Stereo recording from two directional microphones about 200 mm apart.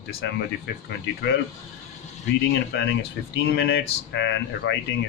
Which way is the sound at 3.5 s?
55° left (ahead or behind).